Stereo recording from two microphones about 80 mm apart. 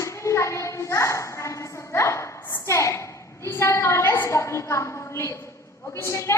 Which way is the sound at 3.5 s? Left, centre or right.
Left.